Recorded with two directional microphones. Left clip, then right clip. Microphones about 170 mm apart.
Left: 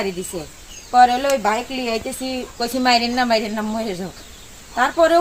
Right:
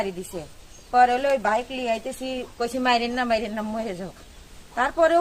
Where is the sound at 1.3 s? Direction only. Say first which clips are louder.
Left 3 dB; centre (ahead or behind).